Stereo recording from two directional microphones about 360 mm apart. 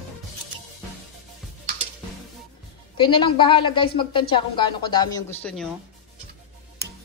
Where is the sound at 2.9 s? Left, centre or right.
Centre.